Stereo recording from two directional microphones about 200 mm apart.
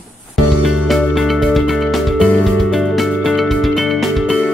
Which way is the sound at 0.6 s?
Centre (ahead or behind).